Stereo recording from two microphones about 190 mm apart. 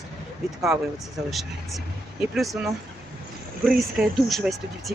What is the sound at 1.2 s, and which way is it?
Speech, centre (ahead or behind).